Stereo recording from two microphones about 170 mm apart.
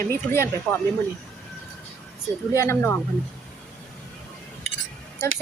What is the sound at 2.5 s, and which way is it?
Speech, 15° left (ahead or behind).